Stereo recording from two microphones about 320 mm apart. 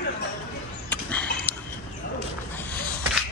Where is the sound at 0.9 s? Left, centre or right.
Centre.